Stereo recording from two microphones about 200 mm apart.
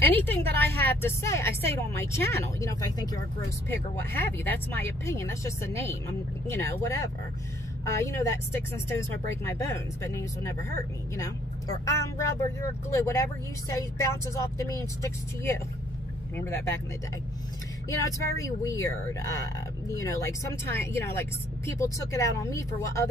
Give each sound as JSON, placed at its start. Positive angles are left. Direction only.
{"t": 0.0, "sound": "a woman's voice", "side_deg": 10}
{"t": 8.1, "sound": "a woman's voice", "side_deg": 15}
{"t": 11.8, "sound": "a woman's voice", "side_deg": 15}
{"t": 14.3, "sound": "a woman's voice", "side_deg": 15}
{"t": 17.8, "sound": "a woman's voice", "side_deg": 15}